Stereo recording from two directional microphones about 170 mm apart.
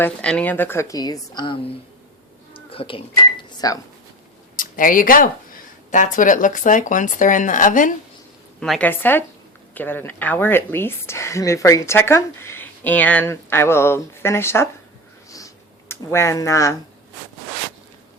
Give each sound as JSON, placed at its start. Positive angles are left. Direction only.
{"t": 0.0, "sound": "a woman's voice", "side_deg": 5}
{"t": 2.5, "sound": "cash register", "side_deg": 35}
{"t": 4.5, "sound": "speech", "side_deg": 55}
{"t": 8.6, "sound": "a woman's voice", "side_deg": 0}
{"t": 15.3, "sound": "a sound", "side_deg": 20}